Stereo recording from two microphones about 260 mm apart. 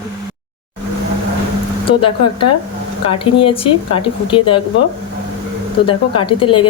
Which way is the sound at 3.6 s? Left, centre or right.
Centre.